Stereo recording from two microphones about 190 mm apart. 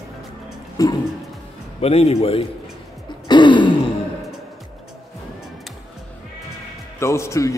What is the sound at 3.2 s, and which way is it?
Throat clearing, 25° left (ahead or behind).